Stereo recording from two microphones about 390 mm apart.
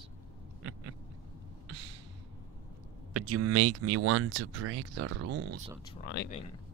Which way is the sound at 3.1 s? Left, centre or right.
Right.